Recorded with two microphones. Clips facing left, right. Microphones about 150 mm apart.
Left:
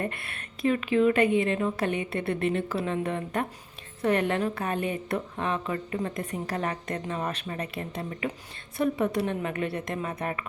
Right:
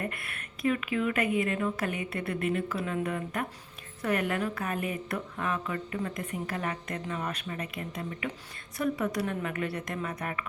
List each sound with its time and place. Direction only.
0.0 s a woman's voice: 30° left (ahead or behind)